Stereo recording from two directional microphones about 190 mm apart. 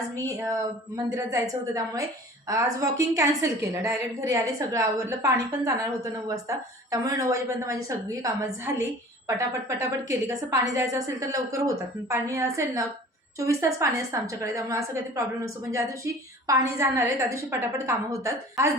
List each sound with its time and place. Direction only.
0.3 s a woman's voice: 15° right (ahead or behind)